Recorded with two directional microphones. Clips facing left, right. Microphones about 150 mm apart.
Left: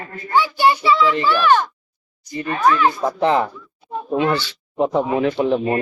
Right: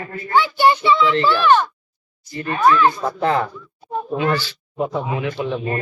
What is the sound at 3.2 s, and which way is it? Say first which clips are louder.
Speech: left 2 dB; 20° left (ahead or behind).